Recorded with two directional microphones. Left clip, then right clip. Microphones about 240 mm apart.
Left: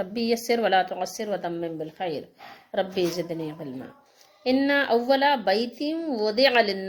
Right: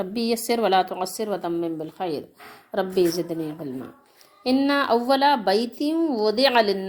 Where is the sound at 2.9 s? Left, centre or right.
Centre.